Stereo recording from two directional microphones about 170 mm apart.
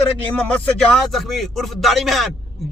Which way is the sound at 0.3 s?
5° left (ahead or behind).